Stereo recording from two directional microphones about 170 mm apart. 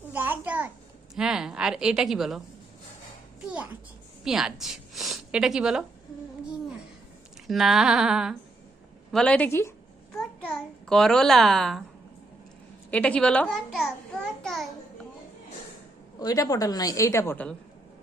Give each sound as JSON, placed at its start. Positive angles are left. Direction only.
{"t": 0.1, "sound": "a sound", "side_deg": -10}
{"t": 3.4, "sound": "music", "side_deg": -10}
{"t": 4.2, "sound": "a woman's voice", "side_deg": 0}
{"t": 7.4, "sound": "a sound", "side_deg": 0}
{"t": 9.1, "sound": "speech", "side_deg": 5}
{"t": 10.2, "sound": "a child's voice", "side_deg": 5}
{"t": 12.9, "sound": "a child's voice", "side_deg": 5}
{"t": 16.1, "sound": "a woman's voice", "side_deg": 20}